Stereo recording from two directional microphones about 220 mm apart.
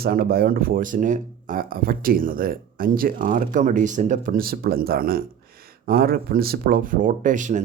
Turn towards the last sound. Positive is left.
turn(degrees=-35)  # may be behind; listen again after turning